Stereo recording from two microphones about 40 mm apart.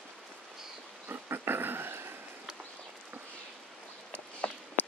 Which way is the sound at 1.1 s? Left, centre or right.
Right.